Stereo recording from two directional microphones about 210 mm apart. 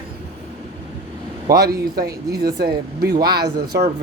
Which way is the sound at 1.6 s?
45° right (ahead or behind).